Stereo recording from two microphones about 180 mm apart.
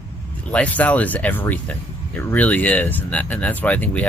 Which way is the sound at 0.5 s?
5° left (ahead or behind).